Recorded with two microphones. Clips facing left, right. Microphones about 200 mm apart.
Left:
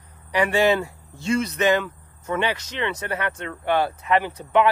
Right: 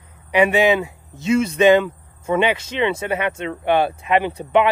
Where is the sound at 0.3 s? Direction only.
20° right (ahead or behind).